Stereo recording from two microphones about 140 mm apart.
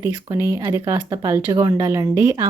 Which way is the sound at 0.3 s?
20° right (ahead or behind).